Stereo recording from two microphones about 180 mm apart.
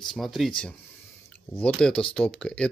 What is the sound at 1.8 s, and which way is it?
Speech, 5° left (ahead or behind).